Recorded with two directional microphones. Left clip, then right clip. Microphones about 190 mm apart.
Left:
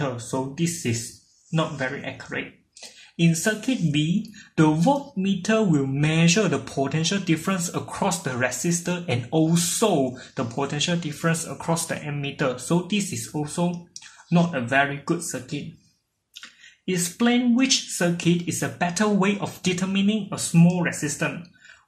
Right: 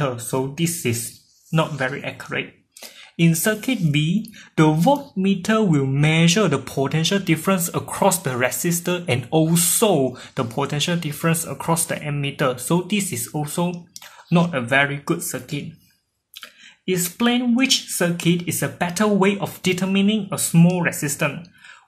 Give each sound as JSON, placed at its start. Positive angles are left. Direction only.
{"t": 0.0, "sound": "speech", "side_deg": -40}